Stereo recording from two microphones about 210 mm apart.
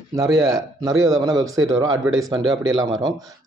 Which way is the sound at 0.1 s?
15° right (ahead or behind).